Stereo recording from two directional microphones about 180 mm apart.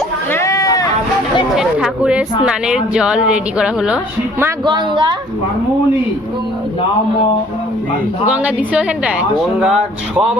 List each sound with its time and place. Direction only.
0.3 s a sound: 15° left (ahead or behind)
1.5 s chatter: 5° right (ahead or behind)
2.4 s a woman's voice: 5° right (ahead or behind)
4.6 s a woman's voice: 25° right (ahead or behind)
8.3 s a woman's voice: 5° right (ahead or behind)